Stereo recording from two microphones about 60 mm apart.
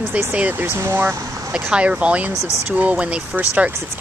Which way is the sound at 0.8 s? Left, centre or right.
Right.